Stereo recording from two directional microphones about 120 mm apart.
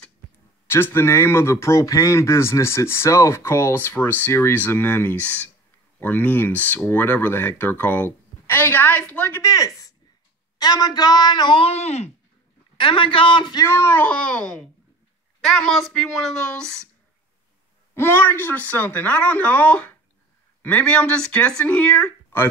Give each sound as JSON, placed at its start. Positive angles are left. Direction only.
{"t": 0.7, "sound": "speech", "side_deg": 20}
{"t": 9.4, "sound": "speech", "side_deg": 25}
{"t": 12.7, "sound": "a man's voice", "side_deg": 45}
{"t": 13.7, "sound": "a woman's voice", "side_deg": 20}
{"t": 17.9, "sound": "speech", "side_deg": 20}